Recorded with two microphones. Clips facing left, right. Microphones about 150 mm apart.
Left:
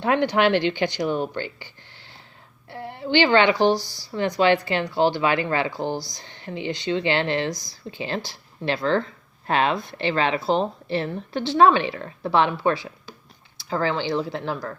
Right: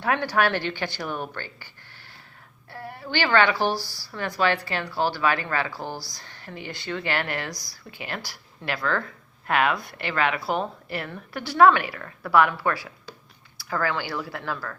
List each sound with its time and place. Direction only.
0.0 s speech: 20° left (ahead or behind)